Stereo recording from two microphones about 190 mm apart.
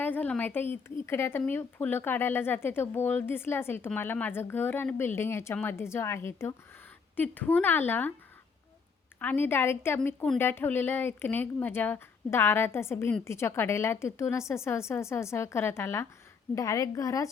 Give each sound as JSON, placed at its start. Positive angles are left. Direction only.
{"t": 0.0, "sound": "a woman's voice", "side_deg": 10}
{"t": 9.1, "sound": "a woman's voice", "side_deg": 10}